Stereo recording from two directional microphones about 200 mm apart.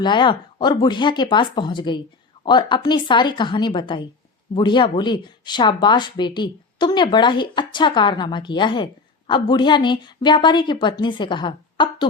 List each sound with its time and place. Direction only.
0.0 s speech: 25° left (ahead or behind)